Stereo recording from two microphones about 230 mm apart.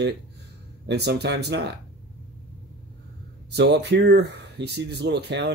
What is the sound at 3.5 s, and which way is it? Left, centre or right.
Speech, right.